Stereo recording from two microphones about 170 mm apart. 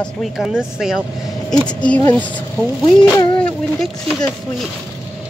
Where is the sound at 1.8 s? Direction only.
10° left (ahead or behind).